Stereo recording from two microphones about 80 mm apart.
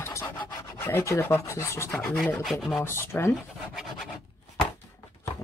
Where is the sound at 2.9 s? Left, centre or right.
Left.